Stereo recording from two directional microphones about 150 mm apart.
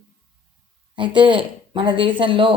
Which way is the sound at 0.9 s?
30° right (ahead or behind).